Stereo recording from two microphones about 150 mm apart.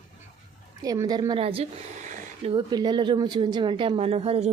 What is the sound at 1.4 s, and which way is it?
A woman's voice, 40° right (ahead or behind).